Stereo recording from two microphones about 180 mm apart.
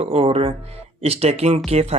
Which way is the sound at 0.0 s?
35° right (ahead or behind).